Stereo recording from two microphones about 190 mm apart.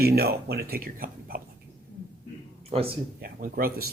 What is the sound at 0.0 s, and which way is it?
Speech, 55° right (ahead or behind).